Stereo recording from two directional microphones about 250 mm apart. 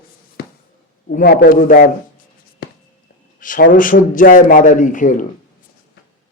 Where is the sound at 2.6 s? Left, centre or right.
Left.